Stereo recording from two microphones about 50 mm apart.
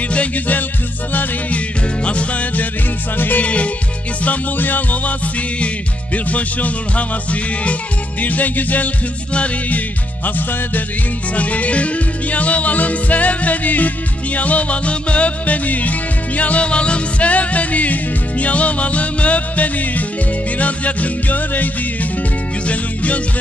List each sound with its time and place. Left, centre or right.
0.1 s music: left
2.0 s music: left
3.4 s music: left